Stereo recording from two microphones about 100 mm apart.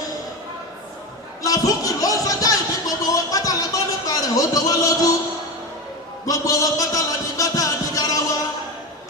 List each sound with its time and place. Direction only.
1.4 s speech: 35° left (ahead or behind)
6.2 s music: 35° left (ahead or behind)